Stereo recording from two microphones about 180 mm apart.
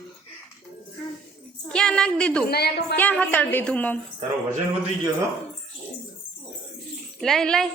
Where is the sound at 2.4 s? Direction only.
60° left (ahead or behind).